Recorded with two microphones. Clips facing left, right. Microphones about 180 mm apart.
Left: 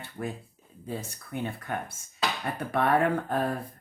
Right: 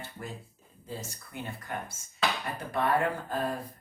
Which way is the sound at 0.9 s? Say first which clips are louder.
Left 5 dB; 60° left (ahead or behind).